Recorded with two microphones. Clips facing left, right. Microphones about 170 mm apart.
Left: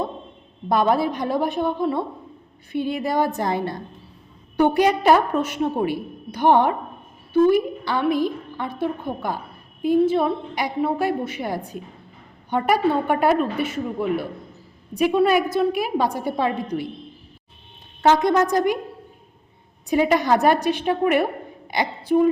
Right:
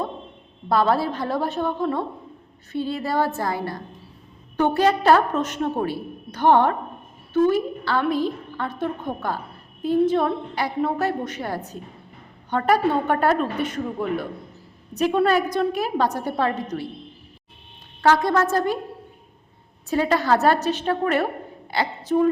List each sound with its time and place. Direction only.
0.7 s a woman's voice: 15° left (ahead or behind)
18.0 s a woman's voice: 20° left (ahead or behind)
19.9 s a woman's voice: 15° left (ahead or behind)